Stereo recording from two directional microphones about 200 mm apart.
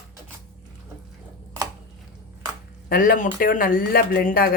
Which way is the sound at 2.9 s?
45° left (ahead or behind).